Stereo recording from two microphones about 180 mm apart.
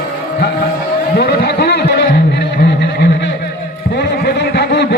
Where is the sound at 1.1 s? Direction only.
60° left (ahead or behind).